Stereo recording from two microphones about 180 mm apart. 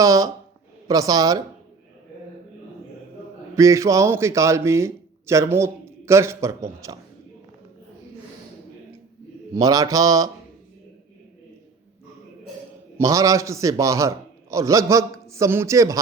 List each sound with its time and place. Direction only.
0.0 s a man's voice: 20° right (ahead or behind)
0.9 s mantra: 20° right (ahead or behind)
3.5 s a man's voice: 15° right (ahead or behind)
9.6 s mantra: 20° right (ahead or behind)
13.0 s a man's voice: 20° right (ahead or behind)